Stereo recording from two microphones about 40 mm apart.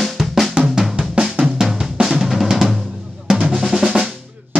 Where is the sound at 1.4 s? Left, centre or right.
Centre.